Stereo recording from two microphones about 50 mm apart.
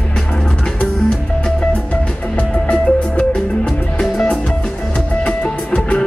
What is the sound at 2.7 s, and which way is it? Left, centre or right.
Music, centre.